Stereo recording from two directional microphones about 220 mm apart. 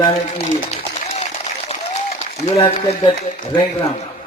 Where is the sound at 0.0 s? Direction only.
30° left (ahead or behind).